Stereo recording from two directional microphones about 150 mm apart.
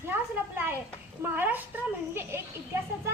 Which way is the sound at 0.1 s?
15° right (ahead or behind).